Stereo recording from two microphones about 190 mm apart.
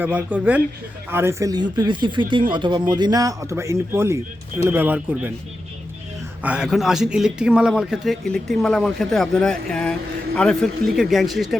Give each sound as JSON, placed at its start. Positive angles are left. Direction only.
{"t": 0.0, "sound": "speech", "side_deg": -10}
{"t": 6.4, "sound": "a man's voice", "side_deg": -5}